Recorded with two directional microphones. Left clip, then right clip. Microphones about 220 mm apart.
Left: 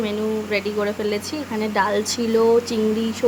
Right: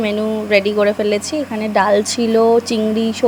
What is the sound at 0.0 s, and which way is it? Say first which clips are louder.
Speech: right 5 dB; 25° right (ahead or behind).